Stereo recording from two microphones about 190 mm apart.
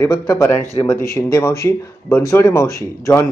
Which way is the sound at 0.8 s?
25° left (ahead or behind).